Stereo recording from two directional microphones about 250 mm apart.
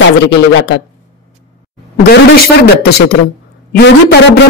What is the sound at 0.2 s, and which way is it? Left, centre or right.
Speech, left.